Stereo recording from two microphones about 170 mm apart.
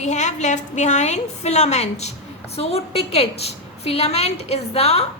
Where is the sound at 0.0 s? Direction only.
45° left (ahead or behind).